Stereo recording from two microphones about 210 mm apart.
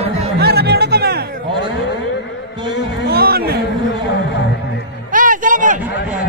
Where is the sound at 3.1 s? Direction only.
45° right (ahead or behind).